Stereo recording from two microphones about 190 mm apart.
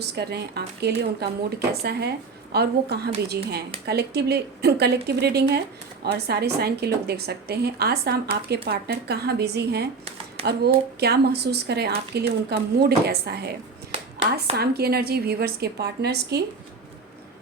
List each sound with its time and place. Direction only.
0.0 s a woman's voice: 60° right (ahead or behind)
14.6 s a woman's voice: 55° right (ahead or behind)